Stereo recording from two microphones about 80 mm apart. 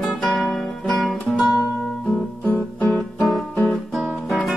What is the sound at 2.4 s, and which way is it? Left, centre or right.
Guitar, left.